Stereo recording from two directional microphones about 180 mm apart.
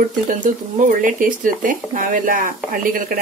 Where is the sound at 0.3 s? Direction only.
45° right (ahead or behind).